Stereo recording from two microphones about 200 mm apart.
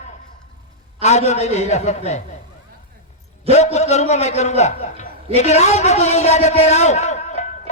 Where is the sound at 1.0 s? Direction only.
35° left (ahead or behind).